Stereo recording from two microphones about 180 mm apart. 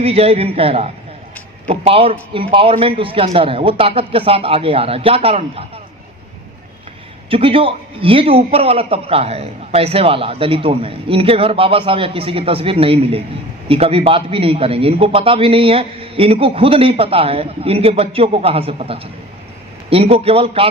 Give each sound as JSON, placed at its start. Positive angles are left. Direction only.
{"t": 0.0, "sound": "a man's voice", "side_deg": -35}
{"t": 7.2, "sound": "a man's voice", "side_deg": -30}